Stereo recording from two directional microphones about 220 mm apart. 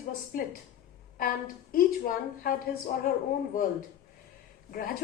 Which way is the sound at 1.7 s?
40° left (ahead or behind).